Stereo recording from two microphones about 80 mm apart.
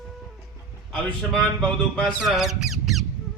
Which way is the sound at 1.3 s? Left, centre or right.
Centre.